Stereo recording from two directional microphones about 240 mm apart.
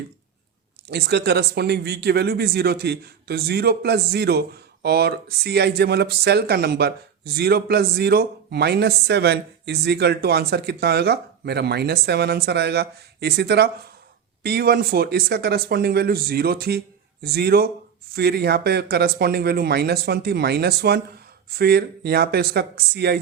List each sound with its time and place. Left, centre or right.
0.9 s speech: right